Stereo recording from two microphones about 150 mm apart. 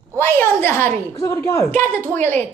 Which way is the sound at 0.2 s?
15° left (ahead or behind).